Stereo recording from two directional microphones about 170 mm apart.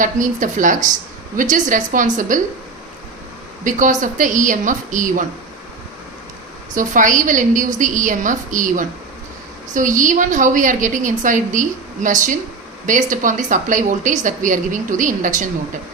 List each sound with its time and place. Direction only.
0.0 s a woman's voice: 50° right (ahead or behind)
3.6 s a woman's voice: 50° right (ahead or behind)
6.7 s a woman's voice: 50° right (ahead or behind)